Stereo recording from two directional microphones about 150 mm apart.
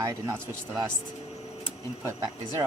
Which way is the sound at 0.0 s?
20° right (ahead or behind).